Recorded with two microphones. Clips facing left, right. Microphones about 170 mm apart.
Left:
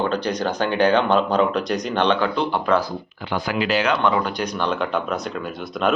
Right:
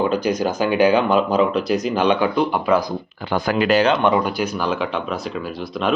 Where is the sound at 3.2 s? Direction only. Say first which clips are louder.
Right 4 dB; 45° right (ahead or behind).